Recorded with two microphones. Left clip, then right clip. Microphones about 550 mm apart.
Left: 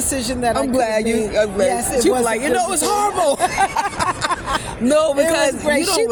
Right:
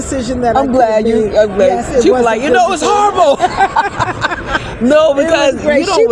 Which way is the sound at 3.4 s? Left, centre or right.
Left.